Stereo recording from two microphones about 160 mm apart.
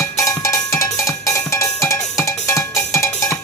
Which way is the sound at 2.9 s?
20° left (ahead or behind).